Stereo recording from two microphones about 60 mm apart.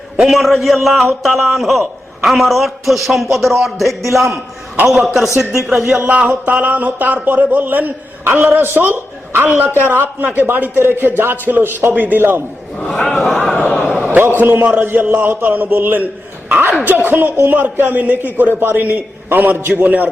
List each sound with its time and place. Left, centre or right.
0.2 s a man's voice: centre
6.0 s speech: right
8.8 s a man's voice: right
12.8 s a man's voice: centre
14.0 s a sound: right
14.7 s speech: right